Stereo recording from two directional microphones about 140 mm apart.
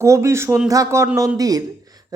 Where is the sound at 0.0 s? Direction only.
20° right (ahead or behind).